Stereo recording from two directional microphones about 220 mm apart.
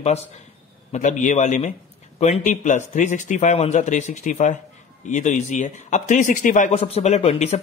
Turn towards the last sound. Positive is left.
turn(degrees=30)  # may be behind; listen again after turning